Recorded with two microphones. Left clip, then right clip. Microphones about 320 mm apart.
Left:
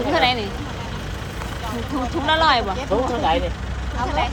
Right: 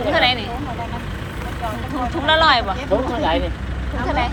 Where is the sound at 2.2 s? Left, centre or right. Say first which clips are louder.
Right 3 dB; centre.